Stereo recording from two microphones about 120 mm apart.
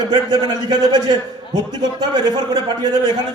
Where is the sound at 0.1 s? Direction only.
35° right (ahead or behind).